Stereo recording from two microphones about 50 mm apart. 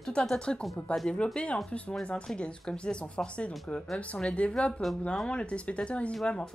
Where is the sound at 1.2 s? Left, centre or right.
Left.